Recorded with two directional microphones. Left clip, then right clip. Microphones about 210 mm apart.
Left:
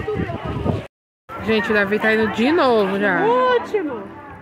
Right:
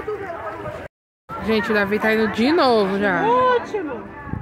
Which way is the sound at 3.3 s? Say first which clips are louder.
Even; 55° left (ahead or behind).